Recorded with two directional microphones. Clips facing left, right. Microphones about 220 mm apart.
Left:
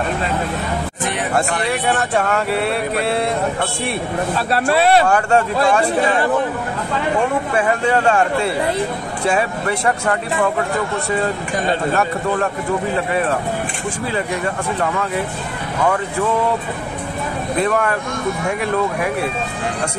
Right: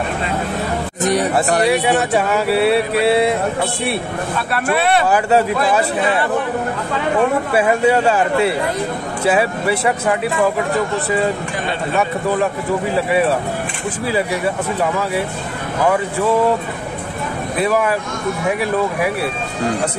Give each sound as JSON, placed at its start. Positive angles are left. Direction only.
{"t": 1.0, "sound": "speech", "side_deg": -40}
{"t": 1.7, "sound": "speech", "side_deg": -5}
{"t": 4.4, "sound": "speech", "side_deg": 30}
{"t": 5.0, "sound": "speech", "side_deg": -5}
{"t": 7.5, "sound": "speech", "side_deg": -10}
{"t": 11.9, "sound": "speech", "side_deg": 0}
{"t": 17.6, "sound": "speech", "side_deg": -5}